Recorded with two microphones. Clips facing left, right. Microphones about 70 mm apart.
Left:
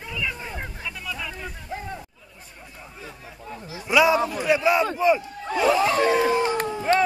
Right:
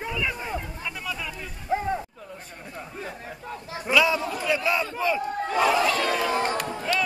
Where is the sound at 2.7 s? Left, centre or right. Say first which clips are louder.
Right 6 dB; right.